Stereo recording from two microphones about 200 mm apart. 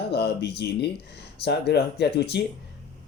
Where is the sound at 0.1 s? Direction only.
55° left (ahead or behind).